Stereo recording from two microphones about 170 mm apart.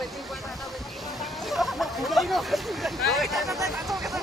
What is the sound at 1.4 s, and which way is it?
Speech, centre (ahead or behind).